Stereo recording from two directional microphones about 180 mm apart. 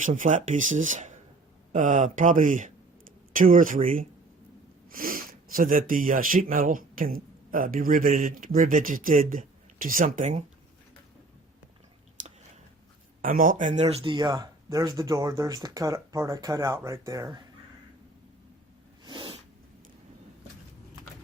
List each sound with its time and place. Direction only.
0.0 s speech: 45° right (ahead or behind)
13.2 s speech: 50° right (ahead or behind); by 17.4 s 20° right (ahead or behind)
19.0 s sneeze: 25° right (ahead or behind)